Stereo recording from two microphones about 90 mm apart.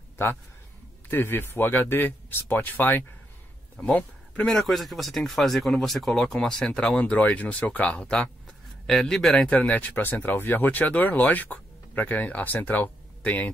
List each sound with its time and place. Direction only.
1.1 s speech: 25° left (ahead or behind)
4.5 s speech: centre (ahead or behind); by 13.5 s 20° left (ahead or behind)